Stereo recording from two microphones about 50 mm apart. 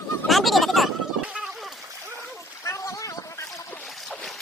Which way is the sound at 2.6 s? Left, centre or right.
Left.